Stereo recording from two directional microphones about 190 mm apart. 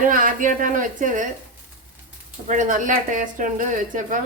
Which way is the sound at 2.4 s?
40° right (ahead or behind).